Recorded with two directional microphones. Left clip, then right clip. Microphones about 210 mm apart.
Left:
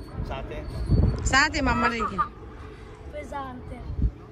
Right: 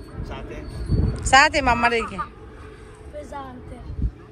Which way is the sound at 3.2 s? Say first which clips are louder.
Even; centre (ahead or behind).